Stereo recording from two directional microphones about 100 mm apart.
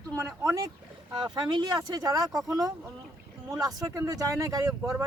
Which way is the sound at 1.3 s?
45° right (ahead or behind).